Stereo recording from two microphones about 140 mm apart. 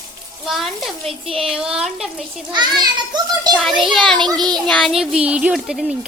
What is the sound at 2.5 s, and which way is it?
A child's voice, 30° right (ahead or behind).